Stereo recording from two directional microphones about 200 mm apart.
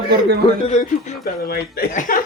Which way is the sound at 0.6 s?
35° left (ahead or behind).